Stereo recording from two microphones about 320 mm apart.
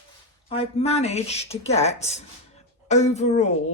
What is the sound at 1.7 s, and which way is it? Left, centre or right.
A woman's voice, centre.